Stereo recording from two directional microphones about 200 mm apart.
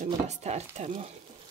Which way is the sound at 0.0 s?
35° right (ahead or behind).